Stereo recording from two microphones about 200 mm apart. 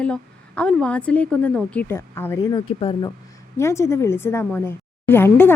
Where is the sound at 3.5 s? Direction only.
15° left (ahead or behind).